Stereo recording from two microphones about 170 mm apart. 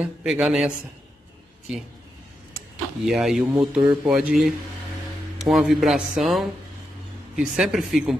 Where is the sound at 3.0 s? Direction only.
Centre (ahead or behind).